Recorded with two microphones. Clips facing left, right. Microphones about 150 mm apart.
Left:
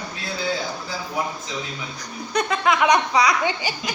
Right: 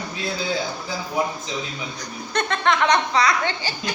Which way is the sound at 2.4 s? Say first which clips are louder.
Left 1 dB; 5° left (ahead or behind).